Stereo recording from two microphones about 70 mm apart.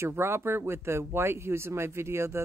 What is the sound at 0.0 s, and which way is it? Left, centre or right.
Speech, right.